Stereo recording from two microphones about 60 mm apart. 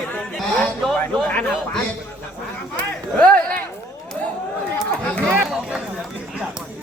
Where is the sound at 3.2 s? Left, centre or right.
Left.